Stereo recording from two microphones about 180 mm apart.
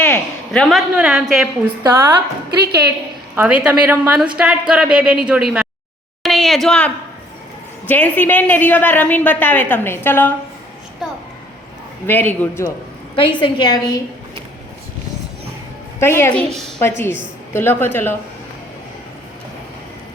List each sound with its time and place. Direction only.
0.0 s a woman's voice: 5° left (ahead or behind)
1.8 s a woman's voice: 15° right (ahead or behind)
3.3 s a woman's voice: 5° right (ahead or behind)
6.2 s a sound: centre (ahead or behind)
7.9 s a woman's voice: 10° left (ahead or behind)
11.0 s a woman's voice: 5° right (ahead or behind)
12.0 s a woman's voice: 10° left (ahead or behind)
13.4 s a woman's voice: 25° left (ahead or behind)
16.0 s a woman's voice: 15° left (ahead or behind)
17.0 s a woman's voice: 15° left (ahead or behind)